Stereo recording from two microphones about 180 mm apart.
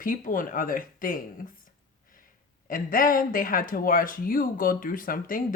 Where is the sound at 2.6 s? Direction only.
50° left (ahead or behind).